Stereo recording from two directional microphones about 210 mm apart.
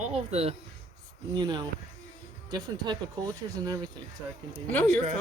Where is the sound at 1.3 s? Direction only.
20° right (ahead or behind).